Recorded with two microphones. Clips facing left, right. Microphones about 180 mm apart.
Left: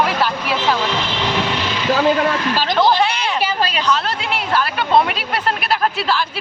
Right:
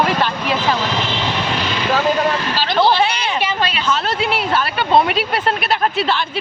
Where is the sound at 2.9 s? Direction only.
Centre (ahead or behind).